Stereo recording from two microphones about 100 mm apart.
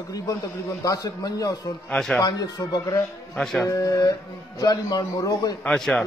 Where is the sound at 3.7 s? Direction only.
35° left (ahead or behind).